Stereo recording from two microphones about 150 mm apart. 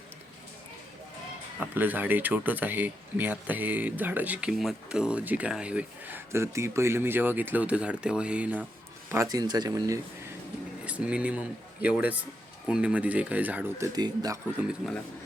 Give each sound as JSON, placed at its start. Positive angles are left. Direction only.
{"t": 1.7, "sound": "speech", "side_deg": -10}
{"t": 9.1, "sound": "speech", "side_deg": -25}
{"t": 10.8, "sound": "speech", "side_deg": -10}
{"t": 13.9, "sound": "speech", "side_deg": -25}
{"t": 14.8, "sound": "speech", "side_deg": 0}